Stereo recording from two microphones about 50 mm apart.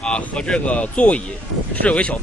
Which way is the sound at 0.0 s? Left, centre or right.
Left.